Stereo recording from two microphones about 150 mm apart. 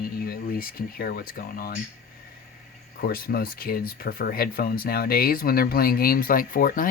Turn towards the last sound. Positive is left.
turn(degrees=65)  # may be behind; listen again after turning